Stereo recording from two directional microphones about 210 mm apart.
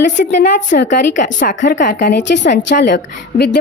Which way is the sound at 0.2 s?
45° left (ahead or behind).